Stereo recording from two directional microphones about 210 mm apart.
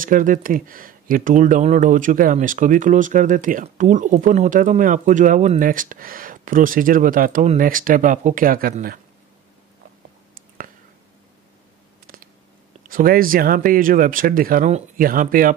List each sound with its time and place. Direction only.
0.0 s speech: 40° right (ahead or behind)
12.1 s a sound: 45° right (ahead or behind)
12.8 s speech: 45° right (ahead or behind)